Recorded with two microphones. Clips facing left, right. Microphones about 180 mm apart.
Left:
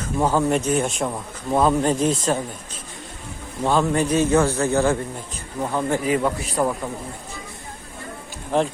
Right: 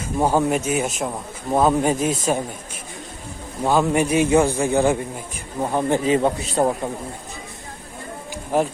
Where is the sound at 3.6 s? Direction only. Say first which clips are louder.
Right 1 dB; 10° right (ahead or behind); by 6.9 s 25° right (ahead or behind).